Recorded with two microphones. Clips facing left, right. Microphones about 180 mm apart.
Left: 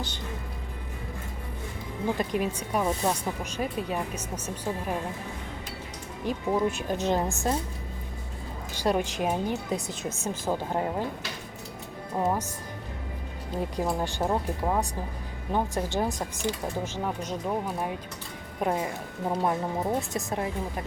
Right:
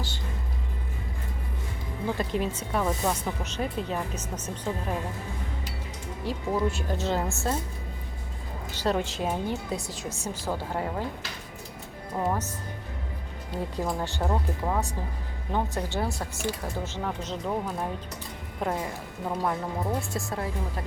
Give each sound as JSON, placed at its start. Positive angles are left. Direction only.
{"t": 2.0, "sound": "speech", "side_deg": 15}
{"t": 6.2, "sound": "speech", "side_deg": 15}
{"t": 8.7, "sound": "speech", "side_deg": 15}
{"t": 12.1, "sound": "speech", "side_deg": 15}
{"t": 13.6, "sound": "speech", "side_deg": 15}